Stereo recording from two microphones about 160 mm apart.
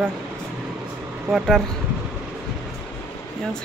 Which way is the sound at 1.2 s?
Centre (ahead or behind).